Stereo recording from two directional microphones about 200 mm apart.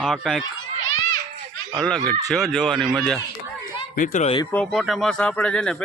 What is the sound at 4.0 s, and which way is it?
Speech, 35° left (ahead or behind).